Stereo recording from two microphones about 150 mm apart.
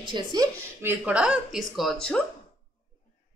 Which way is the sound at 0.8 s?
10° right (ahead or behind).